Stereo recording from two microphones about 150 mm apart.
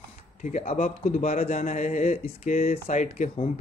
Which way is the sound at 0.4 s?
55° left (ahead or behind).